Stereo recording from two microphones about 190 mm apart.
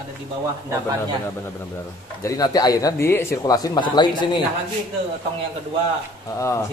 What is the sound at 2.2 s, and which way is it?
Speech, 20° left (ahead or behind).